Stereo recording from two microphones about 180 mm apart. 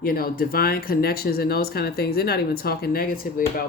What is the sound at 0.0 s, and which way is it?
Speech, 55° left (ahead or behind).